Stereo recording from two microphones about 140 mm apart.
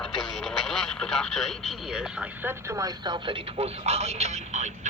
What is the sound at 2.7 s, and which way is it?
Speech, 25° right (ahead or behind).